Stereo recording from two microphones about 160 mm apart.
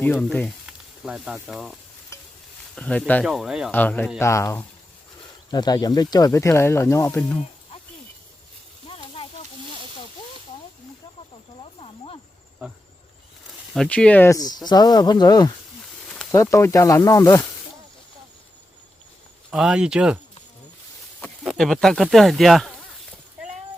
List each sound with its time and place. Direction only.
0.0 s speech: 5° left (ahead or behind)
0.6 s speech: 5° right (ahead or behind)
2.7 s speech: 5° left (ahead or behind)
3.2 s speech: 5° right (ahead or behind)
3.7 s speech: 10° left (ahead or behind)
11.6 s snake: 35° left (ahead or behind)
13.7 s speech: 5° left (ahead or behind); by 17.4 s 20° left (ahead or behind)
19.5 s speech: 5° right (ahead or behind)
21.2 s speech: 5° left (ahead or behind)